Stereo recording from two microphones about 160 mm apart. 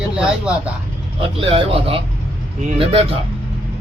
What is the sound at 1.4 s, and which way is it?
Speech, 35° right (ahead or behind).